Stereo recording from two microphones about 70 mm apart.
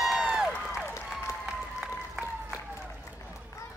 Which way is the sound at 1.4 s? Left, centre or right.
Centre.